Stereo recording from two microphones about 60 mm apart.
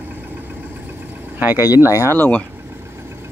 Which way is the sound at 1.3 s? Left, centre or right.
Right.